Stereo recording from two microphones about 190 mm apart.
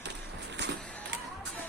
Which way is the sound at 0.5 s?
65° right (ahead or behind).